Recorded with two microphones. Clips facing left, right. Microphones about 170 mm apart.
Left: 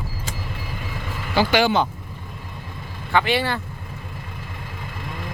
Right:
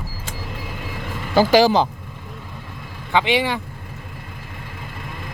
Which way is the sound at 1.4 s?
40° right (ahead or behind).